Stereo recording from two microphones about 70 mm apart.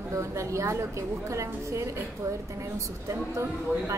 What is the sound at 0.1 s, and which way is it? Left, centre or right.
A woman's voice, right.